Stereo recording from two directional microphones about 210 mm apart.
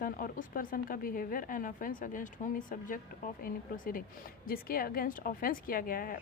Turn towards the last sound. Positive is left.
turn(degrees=45)  # may be behind; listen again after turning